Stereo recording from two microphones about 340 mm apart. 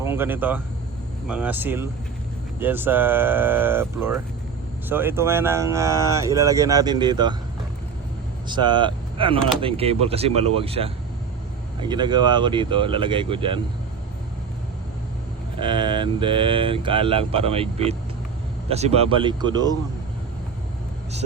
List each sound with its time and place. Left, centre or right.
0.0 s speech: centre
8.4 s speech: centre
15.5 s speech: centre